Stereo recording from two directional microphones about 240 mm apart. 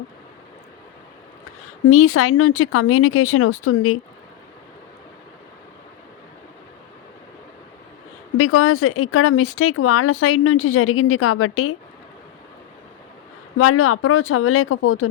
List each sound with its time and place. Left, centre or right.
1.9 s speech: left
8.4 s speech: left
13.6 s speech: left